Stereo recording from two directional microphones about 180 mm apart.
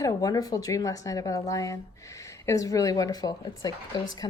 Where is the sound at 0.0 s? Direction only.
20° left (ahead or behind).